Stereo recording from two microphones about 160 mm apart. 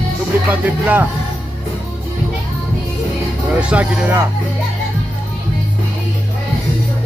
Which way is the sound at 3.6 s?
5° right (ahead or behind).